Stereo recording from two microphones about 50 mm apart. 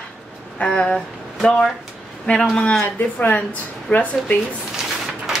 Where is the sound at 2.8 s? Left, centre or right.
Left.